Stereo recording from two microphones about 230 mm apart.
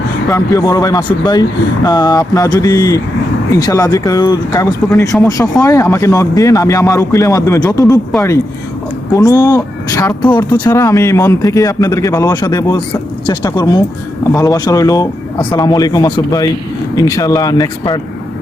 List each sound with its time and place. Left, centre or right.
0.3 s speech: centre
9.1 s speech: centre